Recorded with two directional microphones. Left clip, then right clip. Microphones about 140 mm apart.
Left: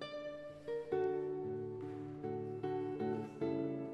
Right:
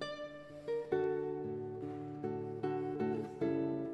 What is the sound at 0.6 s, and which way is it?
Music, 30° right (ahead or behind).